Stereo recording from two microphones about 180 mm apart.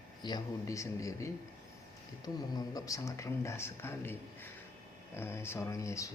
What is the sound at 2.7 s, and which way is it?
Speech, 20° left (ahead or behind).